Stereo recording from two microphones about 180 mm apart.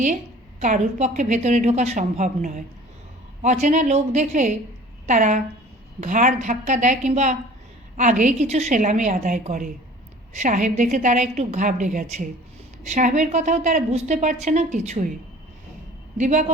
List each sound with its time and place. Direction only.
0.6 s a woman's voice: 40° right (ahead or behind)
16.1 s a woman's voice: 40° right (ahead or behind)